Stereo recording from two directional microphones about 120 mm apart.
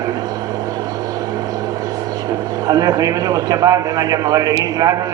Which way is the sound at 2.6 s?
30° right (ahead or behind).